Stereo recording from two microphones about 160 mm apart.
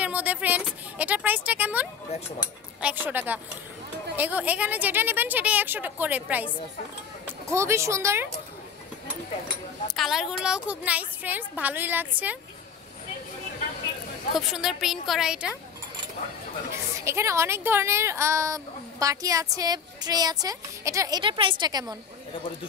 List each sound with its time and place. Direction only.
0.0 s a woman's voice: 10° right (ahead or behind)
9.9 s a woman's voice: centre (ahead or behind)
14.3 s a woman's voice: centre (ahead or behind)
17.0 s speech: 15° right (ahead or behind)
21.2 s speech: 30° right (ahead or behind)